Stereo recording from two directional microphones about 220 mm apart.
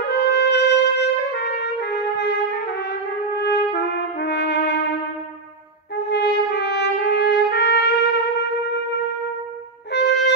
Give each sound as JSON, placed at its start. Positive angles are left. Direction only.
{"t": 0.0, "sound": "trumpet", "side_deg": 50}
{"t": 5.9, "sound": "trumpet", "side_deg": 50}
{"t": 9.9, "sound": "wind instrument", "side_deg": 50}